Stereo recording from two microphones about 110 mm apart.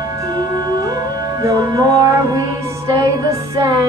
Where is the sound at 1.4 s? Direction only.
35° right (ahead or behind).